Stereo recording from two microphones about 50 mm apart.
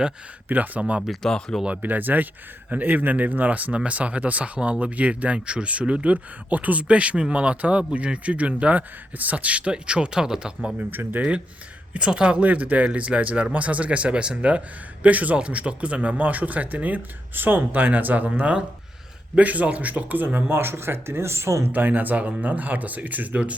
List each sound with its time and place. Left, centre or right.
0.4 s speech: right
1.2 s speech: centre
1.8 s speech: right; by 10.7 s centre
10.8 s speech: right
11.2 s speech: right
21.7 s speech: right